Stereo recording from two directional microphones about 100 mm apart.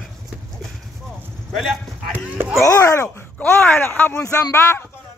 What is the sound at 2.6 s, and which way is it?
Speech, 30° left (ahead or behind).